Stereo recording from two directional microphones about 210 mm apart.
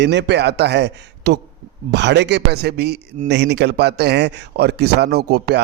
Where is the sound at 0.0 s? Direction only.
55° right (ahead or behind).